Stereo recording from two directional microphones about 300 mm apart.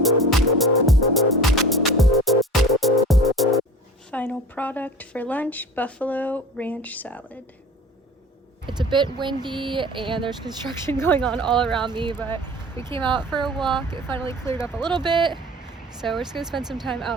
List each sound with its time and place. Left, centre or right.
0.0 s music: centre
4.1 s speech: centre
8.6 s speech: centre
12.1 s speech: centre
12.8 s speech: centre
14.2 s speech: centre
14.8 s speech: centre
15.9 s speech: centre